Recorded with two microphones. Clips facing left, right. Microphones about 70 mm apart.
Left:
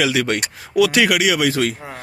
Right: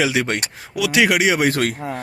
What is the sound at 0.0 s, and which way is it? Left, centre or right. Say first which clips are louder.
Speech: left 1 dB; right.